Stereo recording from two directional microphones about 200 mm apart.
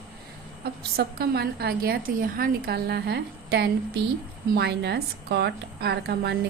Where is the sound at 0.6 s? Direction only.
50° right (ahead or behind).